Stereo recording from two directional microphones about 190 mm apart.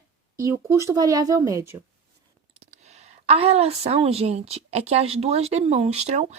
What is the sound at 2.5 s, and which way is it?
A woman's voice, 35° right (ahead or behind).